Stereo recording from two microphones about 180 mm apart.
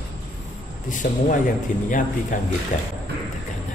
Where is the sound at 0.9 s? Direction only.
45° left (ahead or behind).